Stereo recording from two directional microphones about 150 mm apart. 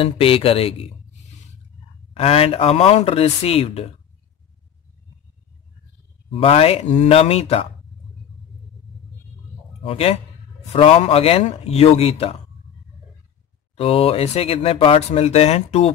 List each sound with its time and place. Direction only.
0.0 s speech: 40° left (ahead or behind)
2.1 s speech: 40° left (ahead or behind)
6.3 s speech: 40° left (ahead or behind)
9.8 s speech: 40° left (ahead or behind)
13.7 s speech: 40° left (ahead or behind)